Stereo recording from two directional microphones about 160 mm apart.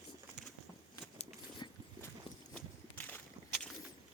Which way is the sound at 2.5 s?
10° left (ahead or behind).